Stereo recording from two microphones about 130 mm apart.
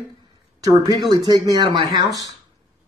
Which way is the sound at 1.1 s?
30° right (ahead or behind).